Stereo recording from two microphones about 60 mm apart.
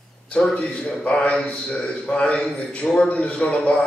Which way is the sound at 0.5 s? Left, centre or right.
Centre.